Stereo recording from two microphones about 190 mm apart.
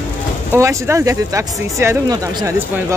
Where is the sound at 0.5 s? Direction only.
15° right (ahead or behind).